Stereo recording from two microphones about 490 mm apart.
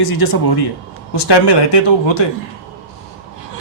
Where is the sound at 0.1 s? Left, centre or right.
Left.